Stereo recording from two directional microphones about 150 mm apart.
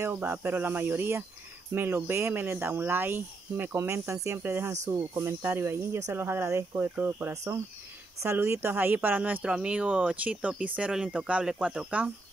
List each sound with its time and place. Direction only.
0.0 s speech: 15° right (ahead or behind)